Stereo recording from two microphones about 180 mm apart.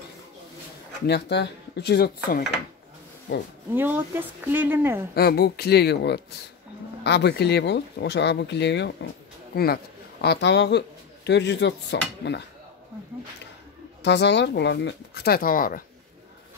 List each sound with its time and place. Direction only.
1.0 s dishes: 70° left (ahead or behind)
3.7 s speech: 10° right (ahead or behind)
5.1 s speech: 60° left (ahead or behind)
7.0 s dishes: 70° left (ahead or behind)
9.5 s speech: 60° left (ahead or behind)
10.2 s dishes: 70° left (ahead or behind)
14.0 s dishes: 70° left (ahead or behind); by 15.8 s 50° left (ahead or behind)